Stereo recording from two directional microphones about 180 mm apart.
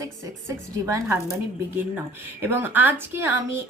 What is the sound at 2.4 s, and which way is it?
A woman's voice, 10° right (ahead or behind).